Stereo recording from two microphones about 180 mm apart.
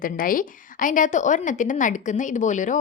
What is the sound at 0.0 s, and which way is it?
A woman's voice, 50° left (ahead or behind).